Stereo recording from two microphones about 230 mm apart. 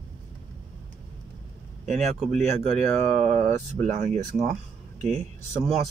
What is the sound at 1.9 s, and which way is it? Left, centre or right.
Speech, right.